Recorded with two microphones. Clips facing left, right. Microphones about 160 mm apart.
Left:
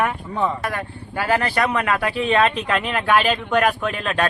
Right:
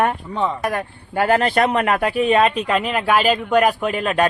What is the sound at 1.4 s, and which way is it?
Speech, 25° right (ahead or behind).